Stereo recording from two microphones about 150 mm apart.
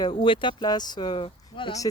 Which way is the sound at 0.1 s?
35° left (ahead or behind).